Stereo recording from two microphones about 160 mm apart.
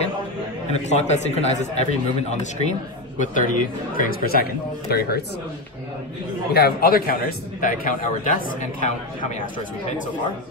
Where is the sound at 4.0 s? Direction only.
65° left (ahead or behind).